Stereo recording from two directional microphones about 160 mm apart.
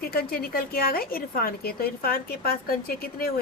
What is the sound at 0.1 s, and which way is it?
A woman's voice, 70° left (ahead or behind).